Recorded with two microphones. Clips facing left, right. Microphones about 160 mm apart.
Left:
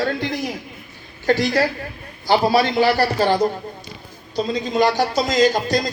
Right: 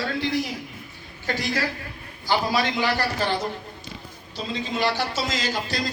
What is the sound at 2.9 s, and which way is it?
A man's voice, 35° left (ahead or behind).